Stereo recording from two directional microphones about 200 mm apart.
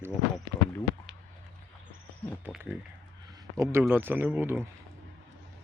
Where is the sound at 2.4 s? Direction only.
5° right (ahead or behind).